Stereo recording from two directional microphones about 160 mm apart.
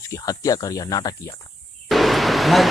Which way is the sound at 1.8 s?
Centre (ahead or behind).